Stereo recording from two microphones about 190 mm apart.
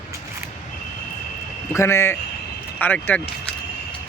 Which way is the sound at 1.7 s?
15° left (ahead or behind).